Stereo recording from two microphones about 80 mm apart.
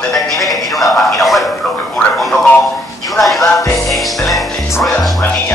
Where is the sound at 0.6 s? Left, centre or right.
Centre.